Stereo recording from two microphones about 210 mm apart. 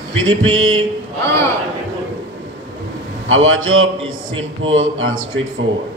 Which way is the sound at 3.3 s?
70° right (ahead or behind).